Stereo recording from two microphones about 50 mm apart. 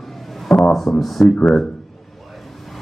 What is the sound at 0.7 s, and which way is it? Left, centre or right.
Speech, centre.